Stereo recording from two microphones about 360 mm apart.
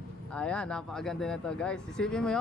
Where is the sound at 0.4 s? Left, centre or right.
Centre.